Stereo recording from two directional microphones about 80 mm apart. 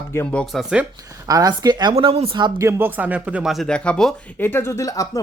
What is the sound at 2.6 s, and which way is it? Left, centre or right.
Speech, right.